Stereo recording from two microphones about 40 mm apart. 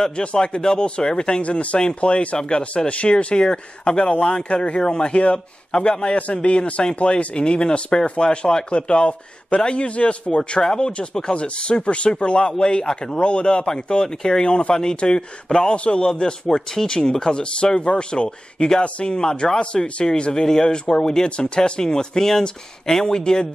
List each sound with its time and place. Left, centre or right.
0.2 s speech: left
0.6 s speech: centre
1.4 s speech: left
14.0 s speech: centre
16.4 s speech: centre